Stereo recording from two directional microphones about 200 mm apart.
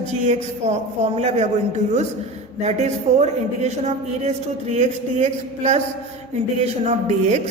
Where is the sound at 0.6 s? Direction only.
35° right (ahead or behind).